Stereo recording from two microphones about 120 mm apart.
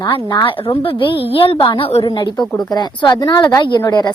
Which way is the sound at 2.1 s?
35° left (ahead or behind).